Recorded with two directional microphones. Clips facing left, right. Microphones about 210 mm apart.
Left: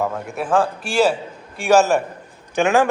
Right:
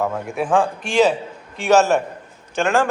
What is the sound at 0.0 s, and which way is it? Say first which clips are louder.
Speech: right 1 dB; 5° left (ahead or behind).